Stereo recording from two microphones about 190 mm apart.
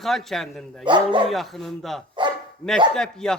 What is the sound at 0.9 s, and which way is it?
Speech, 25° right (ahead or behind).